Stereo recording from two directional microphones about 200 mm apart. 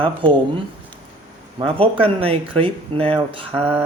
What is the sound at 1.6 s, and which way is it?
Speech, 25° right (ahead or behind).